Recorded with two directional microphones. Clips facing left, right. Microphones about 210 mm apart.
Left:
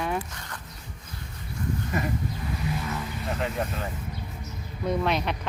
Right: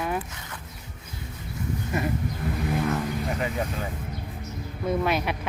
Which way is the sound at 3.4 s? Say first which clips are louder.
Right 1 dB; centre (ahead or behind).